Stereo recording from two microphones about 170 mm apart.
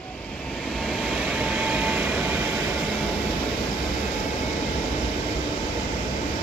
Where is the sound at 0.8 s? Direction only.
Centre (ahead or behind).